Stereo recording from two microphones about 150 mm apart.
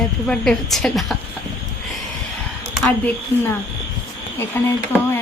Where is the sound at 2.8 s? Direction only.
10° left (ahead or behind).